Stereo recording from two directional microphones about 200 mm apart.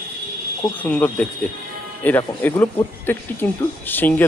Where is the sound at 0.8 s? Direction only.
5° left (ahead or behind).